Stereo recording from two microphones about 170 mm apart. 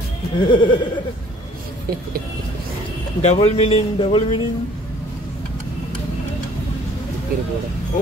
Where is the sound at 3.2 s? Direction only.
35° left (ahead or behind).